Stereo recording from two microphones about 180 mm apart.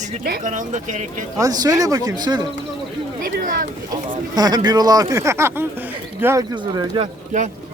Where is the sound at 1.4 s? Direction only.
20° right (ahead or behind).